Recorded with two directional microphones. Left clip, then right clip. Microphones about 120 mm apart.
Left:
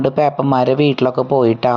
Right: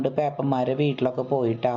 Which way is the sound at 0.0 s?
20° left (ahead or behind).